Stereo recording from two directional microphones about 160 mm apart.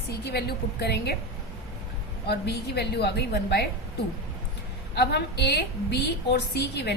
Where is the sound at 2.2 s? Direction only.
90° left.